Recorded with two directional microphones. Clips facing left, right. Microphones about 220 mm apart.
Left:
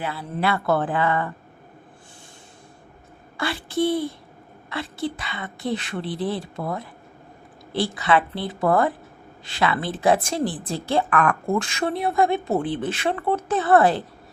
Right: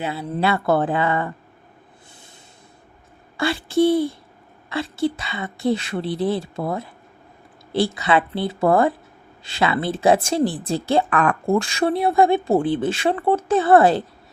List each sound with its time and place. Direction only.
0.0 s speech: 25° right (ahead or behind)
3.3 s speech: 25° right (ahead or behind)